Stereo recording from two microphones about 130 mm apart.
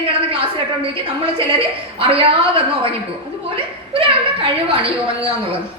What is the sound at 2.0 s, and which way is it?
Speech, 45° right (ahead or behind).